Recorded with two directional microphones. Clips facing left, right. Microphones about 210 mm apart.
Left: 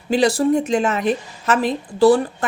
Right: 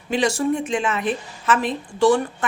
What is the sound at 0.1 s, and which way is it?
Speech, 35° left (ahead or behind).